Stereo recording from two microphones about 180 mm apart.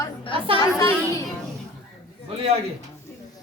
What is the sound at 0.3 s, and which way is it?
Chatter, 30° right (ahead or behind).